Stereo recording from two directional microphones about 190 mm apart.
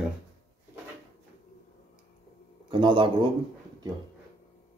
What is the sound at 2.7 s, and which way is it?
Speech, 25° right (ahead or behind).